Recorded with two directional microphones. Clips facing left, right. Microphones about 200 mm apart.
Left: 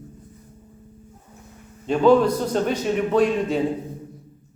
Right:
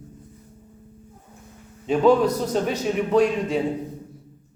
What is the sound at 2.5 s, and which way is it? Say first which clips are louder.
A man's voice: left 1 dB; centre (ahead or behind).